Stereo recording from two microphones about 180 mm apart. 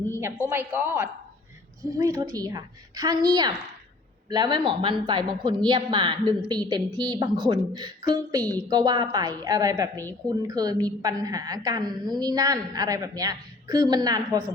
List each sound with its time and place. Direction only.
0.1 s a woman's voice: 15° right (ahead or behind)